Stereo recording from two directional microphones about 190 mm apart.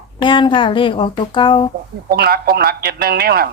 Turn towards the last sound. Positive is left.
turn(degrees=-55)  # may be behind; listen again after turning